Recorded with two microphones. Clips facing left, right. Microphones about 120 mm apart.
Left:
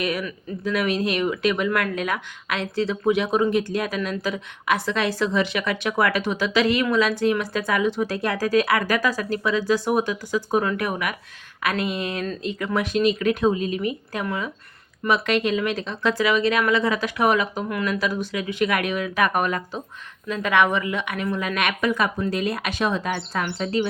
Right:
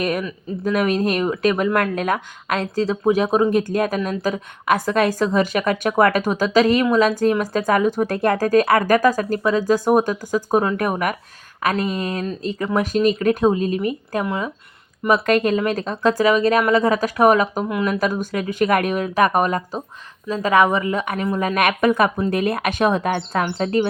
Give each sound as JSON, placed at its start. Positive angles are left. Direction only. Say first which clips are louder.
{"t": 0.0, "sound": "speech", "louder": "right 4 dB", "side_deg": -45}